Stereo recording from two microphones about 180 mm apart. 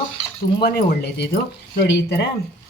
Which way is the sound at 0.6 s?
60° left (ahead or behind).